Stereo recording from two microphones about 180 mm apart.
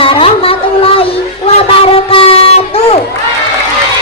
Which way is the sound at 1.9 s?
30° left (ahead or behind).